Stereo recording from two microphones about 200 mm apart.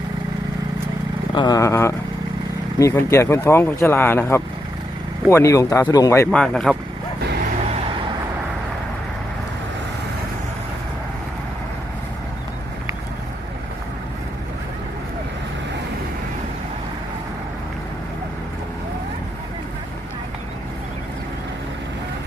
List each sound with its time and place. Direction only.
1.3 s speech: 20° left (ahead or behind)
6.3 s speech: 5° left (ahead or behind)